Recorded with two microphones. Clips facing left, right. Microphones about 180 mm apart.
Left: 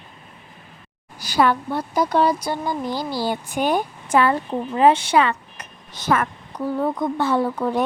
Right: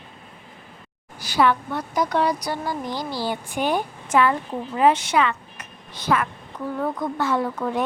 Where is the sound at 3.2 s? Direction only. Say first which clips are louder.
Left 2 dB; 45° left (ahead or behind).